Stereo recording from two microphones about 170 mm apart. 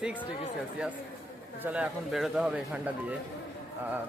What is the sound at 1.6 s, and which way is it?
Speech, 10° right (ahead or behind).